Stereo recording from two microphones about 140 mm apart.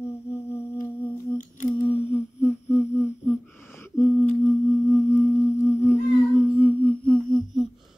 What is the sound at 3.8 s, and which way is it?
Singing bowl, 20° left (ahead or behind).